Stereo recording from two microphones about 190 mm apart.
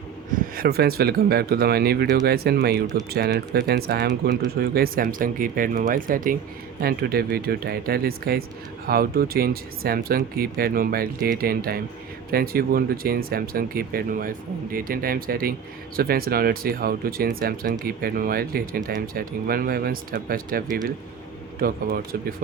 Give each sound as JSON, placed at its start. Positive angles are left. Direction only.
{"t": 0.5, "sound": "speech", "side_deg": -50}